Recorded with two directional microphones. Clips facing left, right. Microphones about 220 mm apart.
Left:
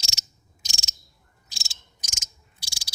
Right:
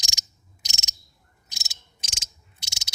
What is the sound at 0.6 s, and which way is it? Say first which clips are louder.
Frog: left 2 dB; 20° right (ahead or behind).